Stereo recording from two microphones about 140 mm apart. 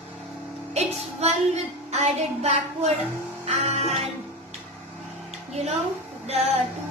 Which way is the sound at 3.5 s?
50° right (ahead or behind).